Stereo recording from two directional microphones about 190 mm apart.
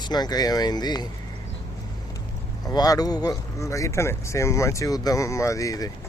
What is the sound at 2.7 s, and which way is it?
Speech, 20° left (ahead or behind).